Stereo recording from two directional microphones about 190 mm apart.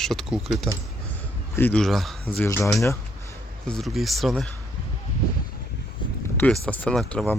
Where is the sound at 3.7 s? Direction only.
Centre (ahead or behind).